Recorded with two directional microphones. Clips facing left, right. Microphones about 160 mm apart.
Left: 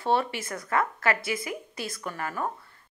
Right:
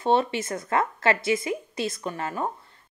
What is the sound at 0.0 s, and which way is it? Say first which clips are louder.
Speech: right 4 dB; 20° right (ahead or behind).